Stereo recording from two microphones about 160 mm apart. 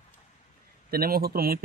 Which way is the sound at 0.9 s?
70° right (ahead or behind).